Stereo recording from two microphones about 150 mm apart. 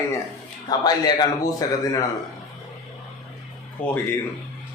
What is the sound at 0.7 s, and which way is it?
A man's voice, 25° left (ahead or behind).